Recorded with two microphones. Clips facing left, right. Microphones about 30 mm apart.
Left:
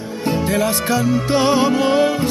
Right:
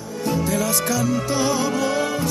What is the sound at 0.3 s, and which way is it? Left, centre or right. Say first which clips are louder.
Music: left 4 dB; left.